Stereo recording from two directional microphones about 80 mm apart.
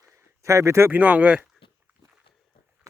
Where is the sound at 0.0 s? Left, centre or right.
Right.